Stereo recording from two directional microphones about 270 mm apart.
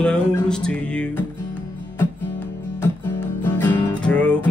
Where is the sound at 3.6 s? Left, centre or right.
Centre.